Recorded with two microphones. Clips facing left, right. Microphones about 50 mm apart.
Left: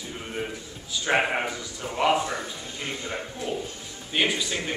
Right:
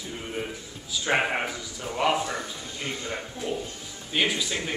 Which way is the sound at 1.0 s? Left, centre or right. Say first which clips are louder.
Left 1 dB; centre.